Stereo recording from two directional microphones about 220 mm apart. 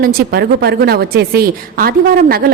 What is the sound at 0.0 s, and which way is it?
A woman's voice, 45° right (ahead or behind).